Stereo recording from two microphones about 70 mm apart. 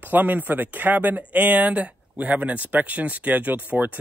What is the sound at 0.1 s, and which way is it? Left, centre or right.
Speech, right.